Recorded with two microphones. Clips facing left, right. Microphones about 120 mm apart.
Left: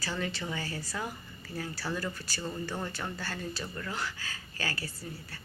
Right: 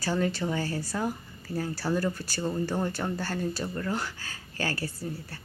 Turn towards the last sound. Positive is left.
turn(degrees=-40)  # may be behind; listen again after turning